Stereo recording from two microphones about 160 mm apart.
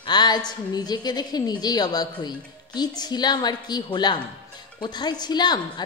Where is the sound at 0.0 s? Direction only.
25° left (ahead or behind).